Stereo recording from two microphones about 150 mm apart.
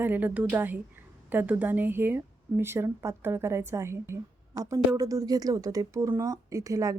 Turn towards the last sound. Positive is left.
turn(degrees=-20)  # may be behind; listen again after turning